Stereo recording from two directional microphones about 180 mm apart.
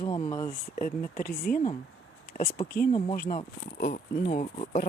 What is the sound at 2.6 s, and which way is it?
Speech, 55° left (ahead or behind).